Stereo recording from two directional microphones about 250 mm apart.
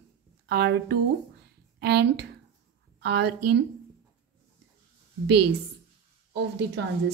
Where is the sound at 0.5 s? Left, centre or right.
Right.